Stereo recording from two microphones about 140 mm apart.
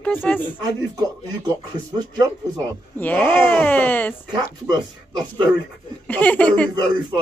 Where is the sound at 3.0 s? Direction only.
15° left (ahead or behind).